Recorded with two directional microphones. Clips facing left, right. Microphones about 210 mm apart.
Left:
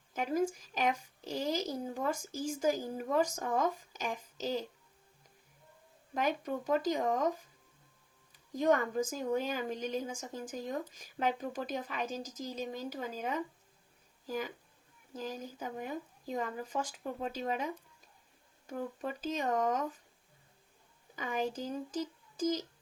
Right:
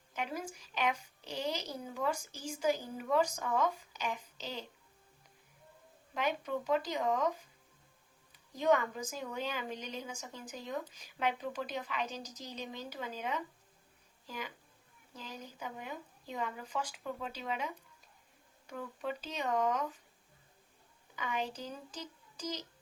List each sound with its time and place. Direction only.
0.1 s a woman's voice: 45° left (ahead or behind)
6.1 s a woman's voice: 45° left (ahead or behind)
8.5 s a woman's voice: 45° left (ahead or behind)
18.7 s a woman's voice: 45° left (ahead or behind)
21.2 s a woman's voice: 45° left (ahead or behind)